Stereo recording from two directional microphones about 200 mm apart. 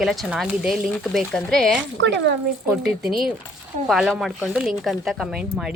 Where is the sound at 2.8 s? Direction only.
Centre (ahead or behind).